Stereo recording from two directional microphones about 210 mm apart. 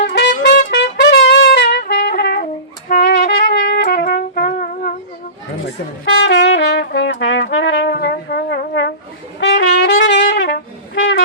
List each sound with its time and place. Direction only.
0.1 s music: 50° left (ahead or behind)
0.8 s trumpet: 55° left (ahead or behind)
2.9 s music: 45° left (ahead or behind)
3.6 s trumpet: 45° left (ahead or behind)
6.1 s brass instrument: 60° left (ahead or behind)
9.4 s trumpet: 55° left (ahead or behind)